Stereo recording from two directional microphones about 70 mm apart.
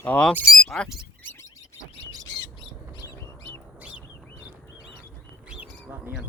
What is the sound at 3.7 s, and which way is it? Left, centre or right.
Bird, centre.